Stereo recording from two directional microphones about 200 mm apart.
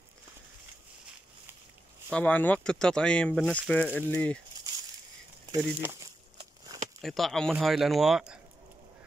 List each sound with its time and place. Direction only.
2.1 s speech: 5° left (ahead or behind)
5.6 s crumpling: 10° right (ahead or behind)
7.0 s speech: centre (ahead or behind)